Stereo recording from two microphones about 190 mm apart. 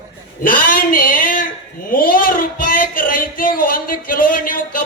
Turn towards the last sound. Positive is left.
turn(degrees=45)  # may be behind; listen again after turning